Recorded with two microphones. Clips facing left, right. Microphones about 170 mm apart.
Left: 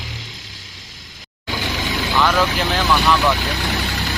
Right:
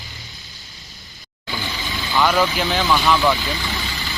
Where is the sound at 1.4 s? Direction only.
75° left (ahead or behind).